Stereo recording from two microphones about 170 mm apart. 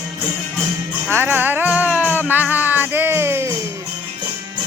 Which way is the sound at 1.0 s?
10° right (ahead or behind).